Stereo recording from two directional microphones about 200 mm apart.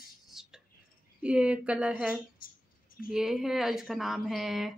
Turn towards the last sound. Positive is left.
turn(degrees=0)  # may be behind; listen again after turning